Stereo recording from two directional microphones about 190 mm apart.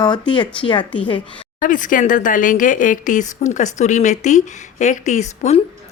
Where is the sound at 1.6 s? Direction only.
45° left (ahead or behind).